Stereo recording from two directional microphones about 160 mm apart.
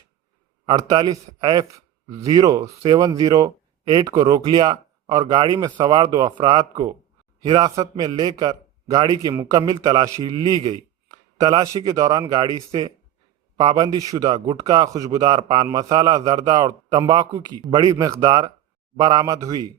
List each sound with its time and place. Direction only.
0.6 s a man's voice: 25° right (ahead or behind)
13.6 s a man's voice: 25° right (ahead or behind)